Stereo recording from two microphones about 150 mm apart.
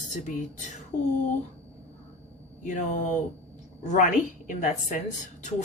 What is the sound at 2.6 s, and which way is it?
Speech, 55° left (ahead or behind).